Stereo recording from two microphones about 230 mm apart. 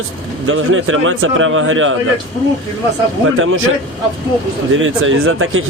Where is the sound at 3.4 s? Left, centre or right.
Right.